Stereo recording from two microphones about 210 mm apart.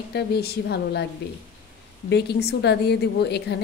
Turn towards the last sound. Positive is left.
turn(degrees=50)  # may be behind; listen again after turning